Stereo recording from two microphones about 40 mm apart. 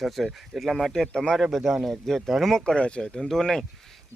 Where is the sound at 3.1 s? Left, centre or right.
Centre.